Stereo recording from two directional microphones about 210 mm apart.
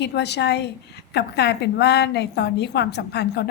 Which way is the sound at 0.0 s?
55° left (ahead or behind).